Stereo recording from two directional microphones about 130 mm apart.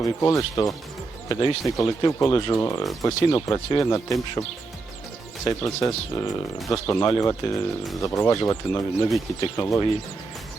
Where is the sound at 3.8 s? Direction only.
25° left (ahead or behind).